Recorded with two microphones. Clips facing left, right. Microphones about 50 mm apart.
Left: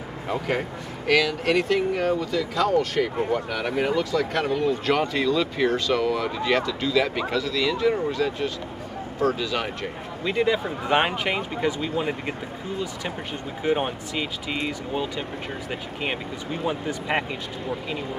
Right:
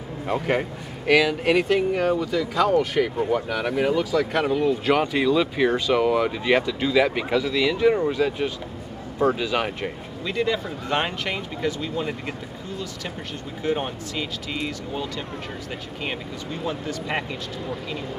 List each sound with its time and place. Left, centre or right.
0.3 s speech: centre
10.2 s speech: centre
15.7 s speech: centre